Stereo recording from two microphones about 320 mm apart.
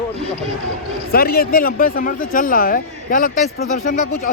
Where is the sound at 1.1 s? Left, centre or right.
Left.